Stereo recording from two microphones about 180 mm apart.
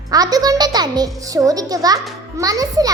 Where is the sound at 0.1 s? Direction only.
20° right (ahead or behind).